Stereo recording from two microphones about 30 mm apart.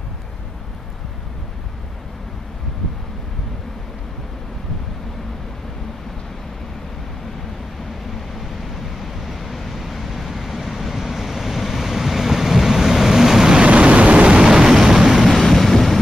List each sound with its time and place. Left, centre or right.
9.0 s vehicle: centre
13.6 s vehicle: right
14.4 s vehicle: centre
15.4 s vehicle: centre